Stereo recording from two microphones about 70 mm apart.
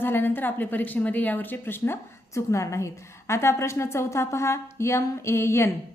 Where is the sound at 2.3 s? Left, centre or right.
Left.